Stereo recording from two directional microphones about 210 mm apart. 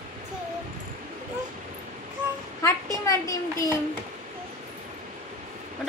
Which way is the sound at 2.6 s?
15° left (ahead or behind).